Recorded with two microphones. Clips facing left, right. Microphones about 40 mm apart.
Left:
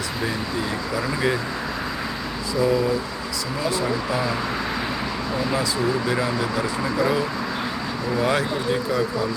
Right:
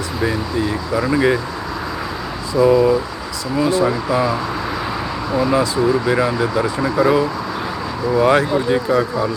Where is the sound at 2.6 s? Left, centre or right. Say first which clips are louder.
Right 8 dB; right.